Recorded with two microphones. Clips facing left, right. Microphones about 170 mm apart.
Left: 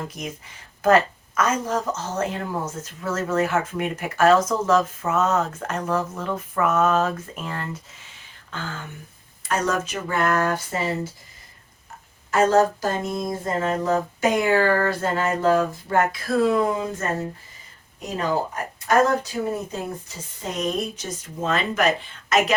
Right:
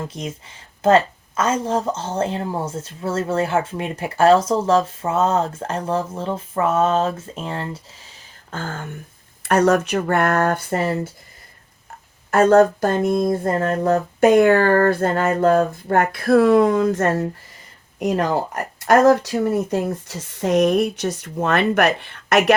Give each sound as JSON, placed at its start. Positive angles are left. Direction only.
{"t": 0.1, "sound": "a woman's voice", "side_deg": -30}
{"t": 8.4, "sound": "speech", "side_deg": -45}
{"t": 9.4, "sound": "speech", "side_deg": -65}
{"t": 12.3, "sound": "speech", "side_deg": -55}